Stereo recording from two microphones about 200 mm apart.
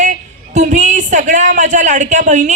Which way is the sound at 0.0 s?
35° right (ahead or behind).